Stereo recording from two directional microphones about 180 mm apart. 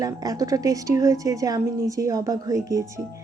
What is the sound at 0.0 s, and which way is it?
A woman's voice, 20° right (ahead or behind).